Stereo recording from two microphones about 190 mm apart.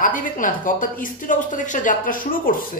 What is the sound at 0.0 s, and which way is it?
A man's voice, 45° left (ahead or behind).